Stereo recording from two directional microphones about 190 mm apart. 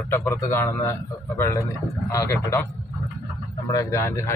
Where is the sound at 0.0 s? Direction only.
10° left (ahead or behind).